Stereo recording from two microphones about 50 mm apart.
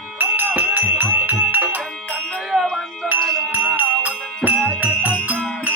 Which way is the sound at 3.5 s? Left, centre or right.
Right.